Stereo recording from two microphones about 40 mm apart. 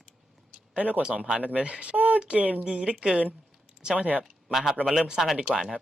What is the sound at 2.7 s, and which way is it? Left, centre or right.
Speech, centre.